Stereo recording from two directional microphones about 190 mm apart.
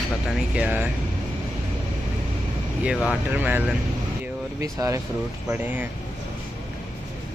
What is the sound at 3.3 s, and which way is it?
Speech, 10° right (ahead or behind).